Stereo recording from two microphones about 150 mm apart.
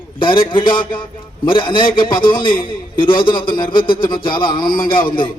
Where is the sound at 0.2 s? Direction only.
35° left (ahead or behind).